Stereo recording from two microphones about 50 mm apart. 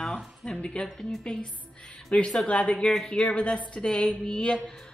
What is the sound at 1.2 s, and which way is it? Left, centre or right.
A woman's voice, centre.